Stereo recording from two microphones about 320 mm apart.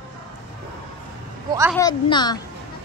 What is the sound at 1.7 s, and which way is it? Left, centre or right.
Speech, centre.